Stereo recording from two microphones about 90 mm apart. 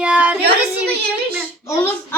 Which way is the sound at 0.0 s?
15° right (ahead or behind).